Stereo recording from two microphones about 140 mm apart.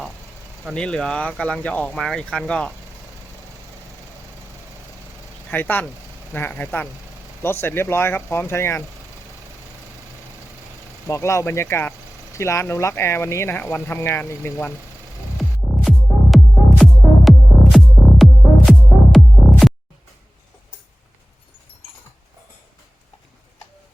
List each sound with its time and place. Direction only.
0.7 s speech: 5° left (ahead or behind)
5.5 s speech: 15° left (ahead or behind)
11.1 s speech: 20° left (ahead or behind)
16.3 s music: centre (ahead or behind)